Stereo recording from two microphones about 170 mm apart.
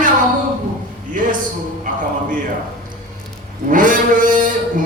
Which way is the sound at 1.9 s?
55° right (ahead or behind).